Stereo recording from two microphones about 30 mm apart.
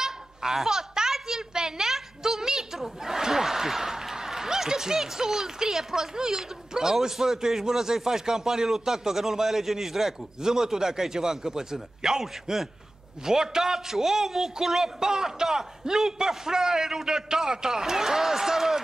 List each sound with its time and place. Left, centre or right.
0.0 s a child's voice: centre